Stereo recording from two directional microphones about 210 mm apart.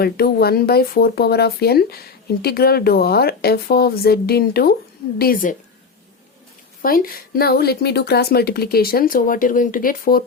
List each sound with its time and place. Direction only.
0.0 s speech: 50° left (ahead or behind)
6.8 s speech: 45° left (ahead or behind)